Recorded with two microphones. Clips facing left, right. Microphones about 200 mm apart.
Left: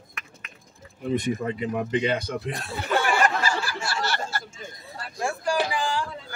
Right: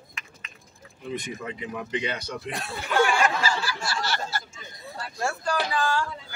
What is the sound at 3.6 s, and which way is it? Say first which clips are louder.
Snicker: left 1 dB; 55° left (ahead or behind).